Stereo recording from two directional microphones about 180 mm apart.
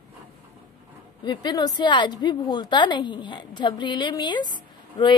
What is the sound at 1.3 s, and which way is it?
A woman's voice, 25° left (ahead or behind).